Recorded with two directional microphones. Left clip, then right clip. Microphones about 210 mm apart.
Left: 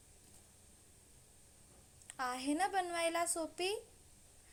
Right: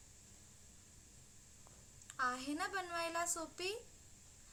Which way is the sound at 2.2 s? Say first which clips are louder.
Left 3 dB; 15° left (ahead or behind).